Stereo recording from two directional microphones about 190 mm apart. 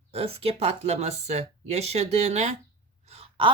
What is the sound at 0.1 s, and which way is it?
A woman's voice, 30° right (ahead or behind).